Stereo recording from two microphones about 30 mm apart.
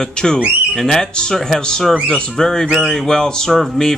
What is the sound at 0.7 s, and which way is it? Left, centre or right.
Speech, centre.